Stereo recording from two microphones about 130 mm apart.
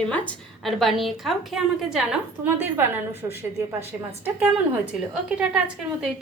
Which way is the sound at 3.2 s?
20° right (ahead or behind).